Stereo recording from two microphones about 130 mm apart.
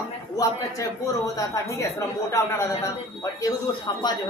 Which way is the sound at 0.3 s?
25° left (ahead or behind).